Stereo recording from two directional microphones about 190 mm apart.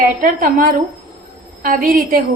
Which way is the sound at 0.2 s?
45° right (ahead or behind).